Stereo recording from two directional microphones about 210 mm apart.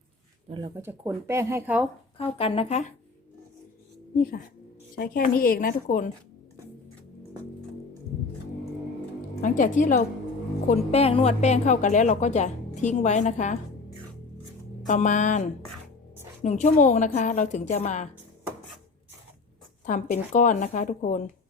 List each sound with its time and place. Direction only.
0.5 s speech: 15° right (ahead or behind)
2.1 s speech: 25° left (ahead or behind)
4.9 s a woman's voice: 40° left (ahead or behind)
9.4 s a woman's voice: 40° left (ahead or behind)
14.8 s a woman's voice: 35° left (ahead or behind)
19.8 s a woman's voice: 35° left (ahead or behind)